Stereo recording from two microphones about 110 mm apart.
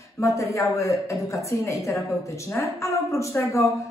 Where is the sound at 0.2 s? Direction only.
30° left (ahead or behind).